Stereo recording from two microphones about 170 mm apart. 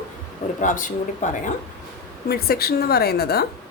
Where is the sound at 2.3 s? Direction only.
65° left (ahead or behind).